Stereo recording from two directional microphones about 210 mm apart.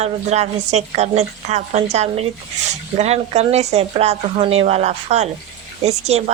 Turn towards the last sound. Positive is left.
turn(degrees=-30)  # may be behind; listen again after turning